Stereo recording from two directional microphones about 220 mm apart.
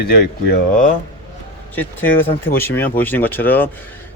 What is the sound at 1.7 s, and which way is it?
Speech, 10° left (ahead or behind).